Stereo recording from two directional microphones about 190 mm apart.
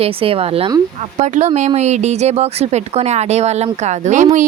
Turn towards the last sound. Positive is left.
turn(degrees=-40)  # may be behind; listen again after turning